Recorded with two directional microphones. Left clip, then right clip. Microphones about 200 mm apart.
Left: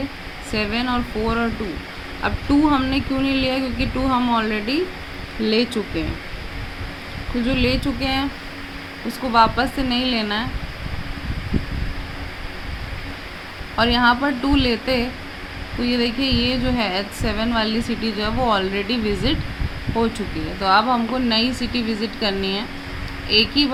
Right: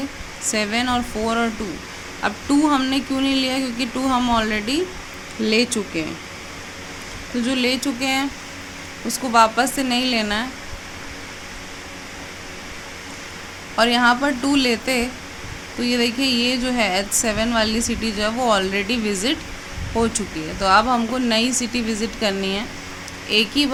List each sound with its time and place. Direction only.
0.5 s speech: 15° right (ahead or behind)
7.4 s speech: 15° right (ahead or behind)
13.7 s speech: 15° right (ahead or behind)